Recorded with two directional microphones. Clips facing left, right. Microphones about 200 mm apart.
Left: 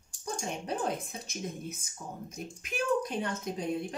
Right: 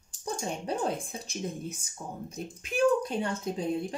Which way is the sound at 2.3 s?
30° right (ahead or behind).